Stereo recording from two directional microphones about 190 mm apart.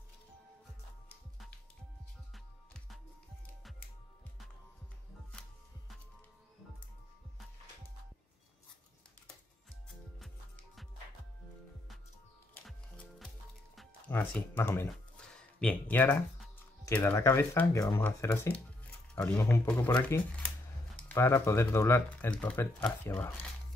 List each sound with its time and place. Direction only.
2.3 s music: centre (ahead or behind)
12.6 s music: centre (ahead or behind)
13.7 s speech: 5° left (ahead or behind)